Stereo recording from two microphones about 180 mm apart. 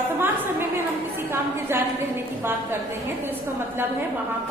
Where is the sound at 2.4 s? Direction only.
10° right (ahead or behind).